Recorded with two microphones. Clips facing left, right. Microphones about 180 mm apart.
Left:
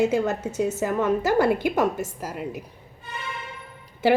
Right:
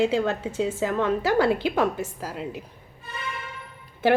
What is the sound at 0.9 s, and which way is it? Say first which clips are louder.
A woman's voice: left 2 dB; 10° left (ahead or behind).